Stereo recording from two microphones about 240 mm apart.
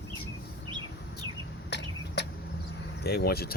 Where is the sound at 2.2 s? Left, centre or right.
Left.